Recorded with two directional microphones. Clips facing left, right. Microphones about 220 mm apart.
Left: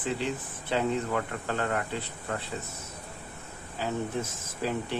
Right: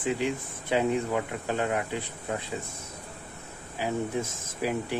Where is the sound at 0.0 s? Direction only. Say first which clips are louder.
Right 3 dB; 10° right (ahead or behind).